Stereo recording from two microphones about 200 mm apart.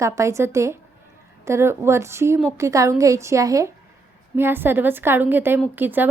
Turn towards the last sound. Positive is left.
turn(degrees=-10)  # may be behind; listen again after turning